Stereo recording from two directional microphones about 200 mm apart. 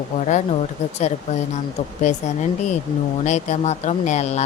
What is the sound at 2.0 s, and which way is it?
Speech, 35° left (ahead or behind).